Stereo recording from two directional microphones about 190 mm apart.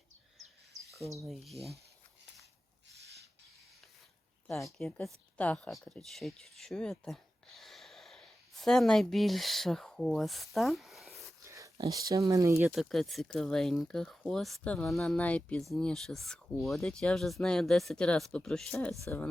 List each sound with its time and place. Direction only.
0.3 s a sound: centre (ahead or behind)
1.2 s speech: centre (ahead or behind)
4.4 s speech: centre (ahead or behind)
11.4 s a sound: 15° right (ahead or behind)
12.1 s speech: 15° right (ahead or behind)
12.6 s speech: centre (ahead or behind)